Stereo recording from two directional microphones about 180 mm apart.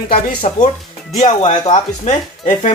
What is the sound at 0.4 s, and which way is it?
Speech, 40° left (ahead or behind).